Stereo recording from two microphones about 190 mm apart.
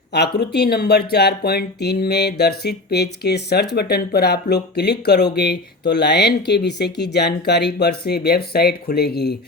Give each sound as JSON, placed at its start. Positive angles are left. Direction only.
{"t": 0.1, "sound": "speech", "side_deg": 60}